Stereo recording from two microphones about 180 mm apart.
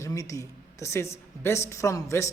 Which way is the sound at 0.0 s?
20° left (ahead or behind).